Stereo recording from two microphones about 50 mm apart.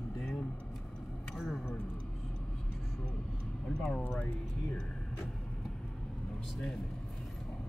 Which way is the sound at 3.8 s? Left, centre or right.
Centre.